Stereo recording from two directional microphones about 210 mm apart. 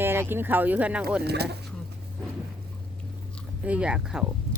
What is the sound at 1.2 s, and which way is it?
Speech, 50° right (ahead or behind).